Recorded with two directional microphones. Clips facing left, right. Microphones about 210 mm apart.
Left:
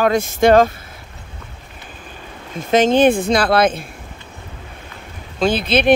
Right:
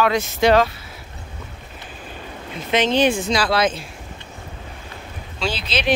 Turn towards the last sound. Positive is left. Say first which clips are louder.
# left 7 dB
turn(degrees=55)  # may be behind; listen again after turning